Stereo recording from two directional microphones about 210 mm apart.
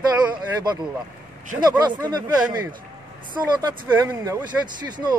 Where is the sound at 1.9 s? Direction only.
20° right (ahead or behind).